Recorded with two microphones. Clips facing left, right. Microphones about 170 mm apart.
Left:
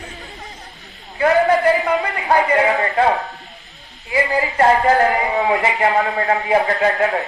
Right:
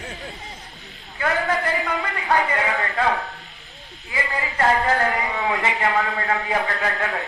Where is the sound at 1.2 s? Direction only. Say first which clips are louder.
Left 9 dB; 35° left (ahead or behind).